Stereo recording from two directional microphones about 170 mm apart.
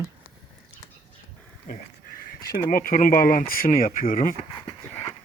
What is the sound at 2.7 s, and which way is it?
Speech, 55° left (ahead or behind).